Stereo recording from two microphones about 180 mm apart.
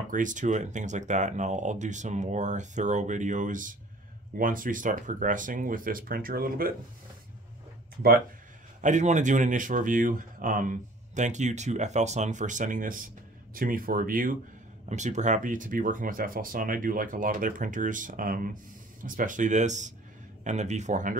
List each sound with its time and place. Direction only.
0.1 s speech: 45° right (ahead or behind)
8.8 s speech: 40° right (ahead or behind)